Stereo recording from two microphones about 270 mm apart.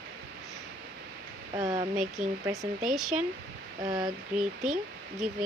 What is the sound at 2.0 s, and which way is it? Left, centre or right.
Speech, centre.